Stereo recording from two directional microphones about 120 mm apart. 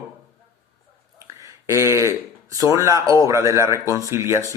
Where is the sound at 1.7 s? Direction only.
25° right (ahead or behind).